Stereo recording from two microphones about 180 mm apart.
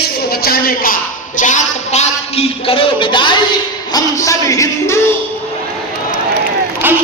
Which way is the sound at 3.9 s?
20° left (ahead or behind).